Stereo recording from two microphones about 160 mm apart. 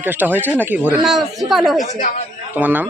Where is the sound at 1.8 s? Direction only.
50° left (ahead or behind).